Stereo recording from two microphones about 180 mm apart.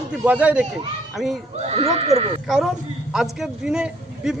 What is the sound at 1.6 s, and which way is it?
Speech, 35° right (ahead or behind).